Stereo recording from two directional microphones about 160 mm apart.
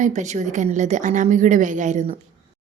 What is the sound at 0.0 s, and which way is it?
A woman's voice, 45° right (ahead or behind).